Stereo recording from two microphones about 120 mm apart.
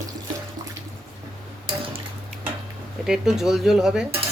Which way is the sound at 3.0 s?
5° right (ahead or behind).